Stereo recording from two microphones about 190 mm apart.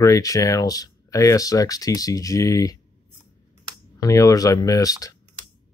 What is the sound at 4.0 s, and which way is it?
Speech, 15° left (ahead or behind).